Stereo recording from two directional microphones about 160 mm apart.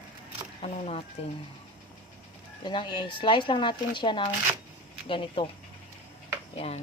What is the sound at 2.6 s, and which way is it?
Speech, 30° left (ahead or behind).